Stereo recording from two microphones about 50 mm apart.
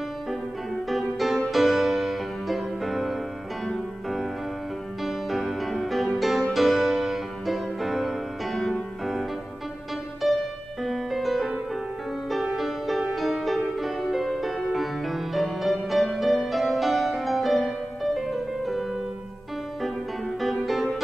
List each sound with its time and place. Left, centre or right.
0.8 s music: centre
5.0 s music: centre
10.2 s music: centre
12.5 s music: centre
20.3 s music: centre